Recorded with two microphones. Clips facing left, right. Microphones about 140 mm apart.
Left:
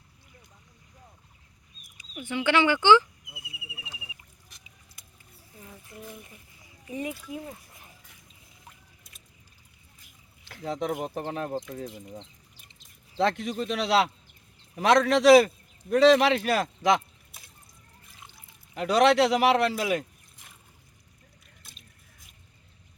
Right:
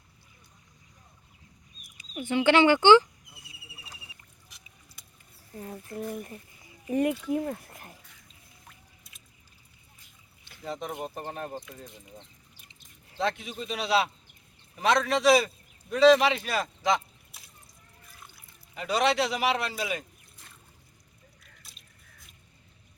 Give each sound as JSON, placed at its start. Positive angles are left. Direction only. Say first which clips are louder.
{"t": 2.2, "sound": "speech", "louder": "right 3 dB", "side_deg": -25}
{"t": 4.4, "sound": "a sound", "louder": "even", "side_deg": 0}
{"t": 5.5, "sound": "speech", "louder": "right 9 dB", "side_deg": -50}
{"t": 10.5, "sound": "a man's voice", "louder": "left 5 dB", "side_deg": 75}
{"t": 13.1, "sound": "a man's voice", "louder": "left 5 dB", "side_deg": 70}
{"t": 18.7, "sound": "a man's voice", "louder": "left 5 dB", "side_deg": 70}
{"t": 21.6, "sound": "a sound", "louder": "left 2 dB", "side_deg": 0}